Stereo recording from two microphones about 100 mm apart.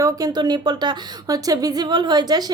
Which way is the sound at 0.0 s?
40° right (ahead or behind).